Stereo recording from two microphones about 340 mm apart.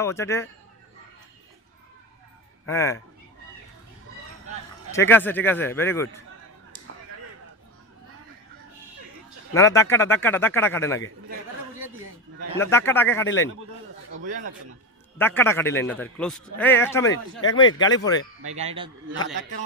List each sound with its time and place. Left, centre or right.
0.0 s a man's voice: centre
2.6 s a man's voice: centre
4.9 s a man's voice: centre
9.6 s a man's voice: centre
12.5 s a man's voice: centre
14.2 s a man's voice: right
15.1 s a man's voice: centre
18.4 s a man's voice: centre